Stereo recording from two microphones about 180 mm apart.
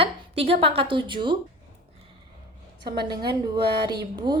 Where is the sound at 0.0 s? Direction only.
30° right (ahead or behind).